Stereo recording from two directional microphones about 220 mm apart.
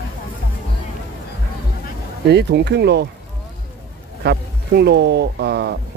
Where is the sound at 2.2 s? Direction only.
50° right (ahead or behind).